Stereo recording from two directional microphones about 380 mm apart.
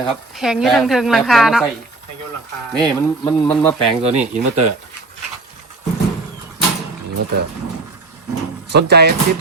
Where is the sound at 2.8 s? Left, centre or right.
Centre.